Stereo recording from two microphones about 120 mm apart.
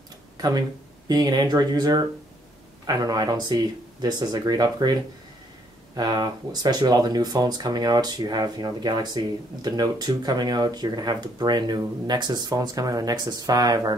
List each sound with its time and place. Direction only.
0.4 s speech: 35° right (ahead or behind)
5.9 s speech: 35° right (ahead or behind)